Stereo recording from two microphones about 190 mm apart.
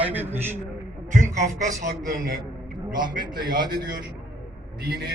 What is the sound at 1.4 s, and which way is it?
Speech, 45° right (ahead or behind).